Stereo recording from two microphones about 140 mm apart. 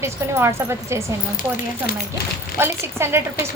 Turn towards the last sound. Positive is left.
turn(degrees=-15)  # may be behind; listen again after turning